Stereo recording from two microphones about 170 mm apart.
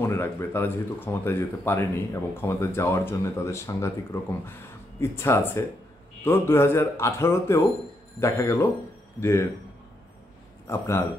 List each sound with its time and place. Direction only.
0.0 s speech: 15° left (ahead or behind)
10.7 s speech: 15° left (ahead or behind)